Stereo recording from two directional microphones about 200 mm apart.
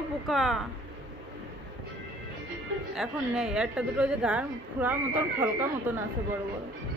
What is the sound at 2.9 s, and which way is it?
A woman's voice, 5° right (ahead or behind).